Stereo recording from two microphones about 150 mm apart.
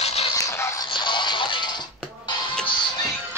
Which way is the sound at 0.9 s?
30° left (ahead or behind).